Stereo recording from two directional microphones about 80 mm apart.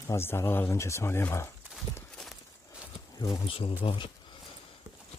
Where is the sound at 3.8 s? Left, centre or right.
Left.